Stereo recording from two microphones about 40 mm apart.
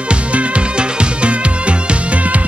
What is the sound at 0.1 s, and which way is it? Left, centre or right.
Music, right.